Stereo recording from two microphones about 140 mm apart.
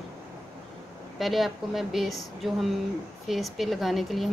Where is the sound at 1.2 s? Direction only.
Centre (ahead or behind).